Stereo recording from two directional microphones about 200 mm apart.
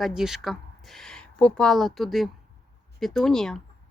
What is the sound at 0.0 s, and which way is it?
Speech, centre (ahead or behind).